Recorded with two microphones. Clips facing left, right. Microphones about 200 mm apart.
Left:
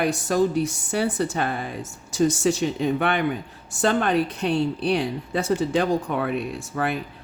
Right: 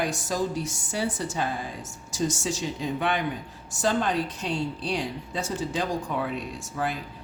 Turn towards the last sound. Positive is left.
turn(degrees=60)  # may be behind; listen again after turning